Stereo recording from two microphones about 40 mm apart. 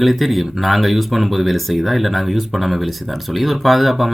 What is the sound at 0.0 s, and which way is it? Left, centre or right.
Speech, centre.